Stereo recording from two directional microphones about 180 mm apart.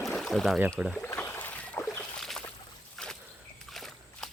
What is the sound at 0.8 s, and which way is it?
Speech, centre (ahead or behind).